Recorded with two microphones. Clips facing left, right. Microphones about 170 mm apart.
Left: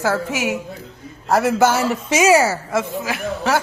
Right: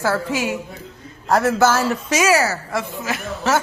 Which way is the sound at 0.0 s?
15° left (ahead or behind).